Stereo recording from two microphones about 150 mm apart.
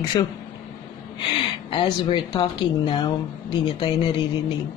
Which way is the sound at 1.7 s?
35° left (ahead or behind).